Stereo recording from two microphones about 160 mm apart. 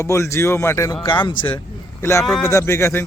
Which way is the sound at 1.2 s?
30° left (ahead or behind).